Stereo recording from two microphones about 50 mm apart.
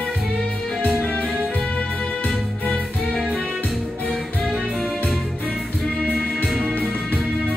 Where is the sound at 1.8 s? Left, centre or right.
Left.